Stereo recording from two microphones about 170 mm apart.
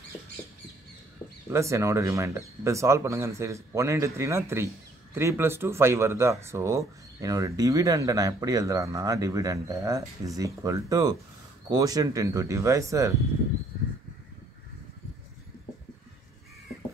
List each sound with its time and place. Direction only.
1.5 s speech: 15° right (ahead or behind)